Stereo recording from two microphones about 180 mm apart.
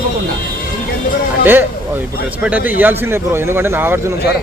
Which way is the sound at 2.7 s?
10° right (ahead or behind).